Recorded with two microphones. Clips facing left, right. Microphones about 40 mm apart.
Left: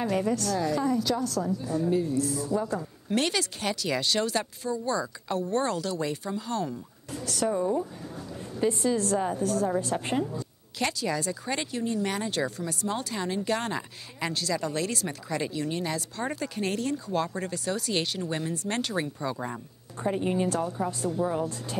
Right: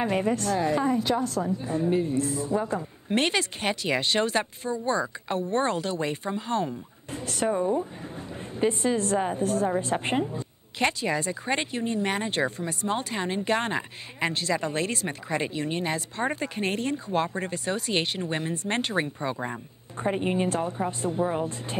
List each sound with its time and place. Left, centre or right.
0.0 s speech: right